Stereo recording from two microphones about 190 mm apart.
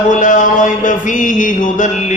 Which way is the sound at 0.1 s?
45° left (ahead or behind).